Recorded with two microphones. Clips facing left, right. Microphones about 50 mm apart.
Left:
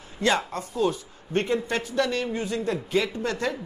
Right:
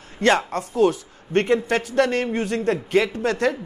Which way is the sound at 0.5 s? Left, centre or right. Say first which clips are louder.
Right 6 dB; right.